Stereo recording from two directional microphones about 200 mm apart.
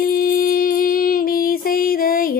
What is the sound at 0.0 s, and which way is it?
Music, 45° left (ahead or behind).